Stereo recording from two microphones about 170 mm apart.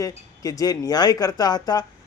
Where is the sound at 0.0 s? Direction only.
20° left (ahead or behind).